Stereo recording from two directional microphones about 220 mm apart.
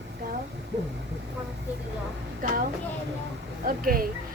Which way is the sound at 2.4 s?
40° right (ahead or behind).